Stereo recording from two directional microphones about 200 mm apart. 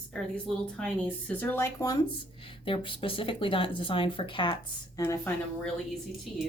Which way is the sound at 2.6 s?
25° left (ahead or behind).